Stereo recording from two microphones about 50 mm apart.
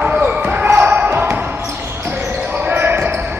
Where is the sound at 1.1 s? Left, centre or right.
Right.